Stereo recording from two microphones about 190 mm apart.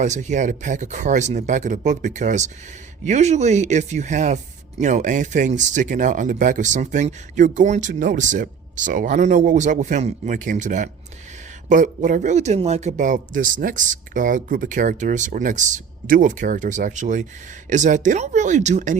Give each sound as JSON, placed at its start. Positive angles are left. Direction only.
{"t": 0.0, "sound": "speech", "side_deg": -40}